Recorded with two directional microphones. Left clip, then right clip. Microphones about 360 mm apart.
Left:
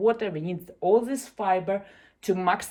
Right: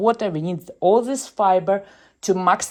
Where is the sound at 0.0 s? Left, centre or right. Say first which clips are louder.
Right 5 dB; centre.